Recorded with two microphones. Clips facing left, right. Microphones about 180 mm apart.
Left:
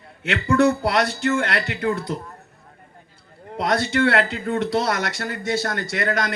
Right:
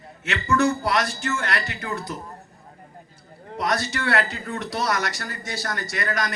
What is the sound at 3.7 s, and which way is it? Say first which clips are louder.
Speech: left 9 dB; 55° left (ahead or behind).